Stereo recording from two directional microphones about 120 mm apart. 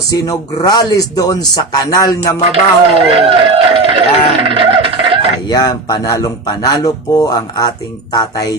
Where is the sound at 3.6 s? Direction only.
50° right (ahead or behind).